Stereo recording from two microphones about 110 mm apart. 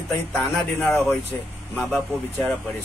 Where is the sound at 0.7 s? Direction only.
15° left (ahead or behind).